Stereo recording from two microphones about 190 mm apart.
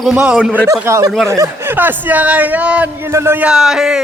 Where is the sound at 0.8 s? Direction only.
15° right (ahead or behind).